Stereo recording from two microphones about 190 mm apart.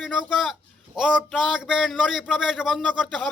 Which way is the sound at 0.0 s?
Centre (ahead or behind).